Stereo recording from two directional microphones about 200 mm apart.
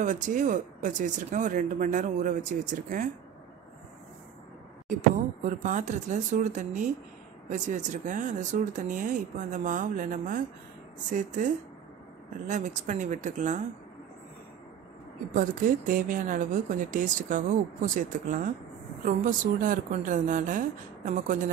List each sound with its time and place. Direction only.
0.0 s speech: 40° right (ahead or behind)
5.4 s speech: 40° right (ahead or behind)
15.3 s speech: 45° right (ahead or behind)